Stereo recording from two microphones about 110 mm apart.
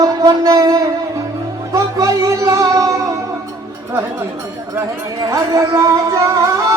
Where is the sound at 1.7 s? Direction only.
30° right (ahead or behind).